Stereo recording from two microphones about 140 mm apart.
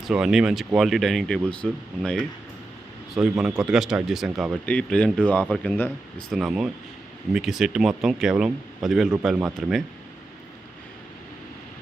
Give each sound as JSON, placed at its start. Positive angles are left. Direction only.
{"t": 0.0, "sound": "speech", "side_deg": -5}
{"t": 3.2, "sound": "speech", "side_deg": -5}
{"t": 4.6, "sound": "speech", "side_deg": 10}
{"t": 6.3, "sound": "speech", "side_deg": 0}